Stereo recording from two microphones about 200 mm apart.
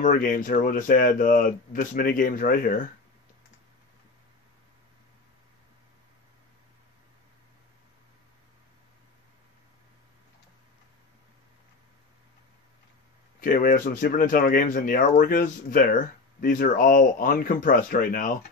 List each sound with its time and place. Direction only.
0.0 s speech: 40° left (ahead or behind)
13.4 s speech: 45° left (ahead or behind)